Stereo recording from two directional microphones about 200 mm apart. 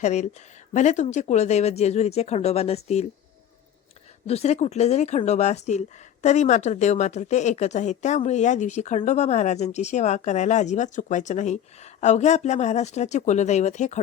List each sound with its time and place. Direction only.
0.0 s speech: 35° left (ahead or behind)
4.3 s speech: 30° left (ahead or behind)